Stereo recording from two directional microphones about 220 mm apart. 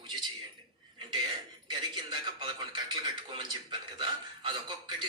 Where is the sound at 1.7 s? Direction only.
20° right (ahead or behind).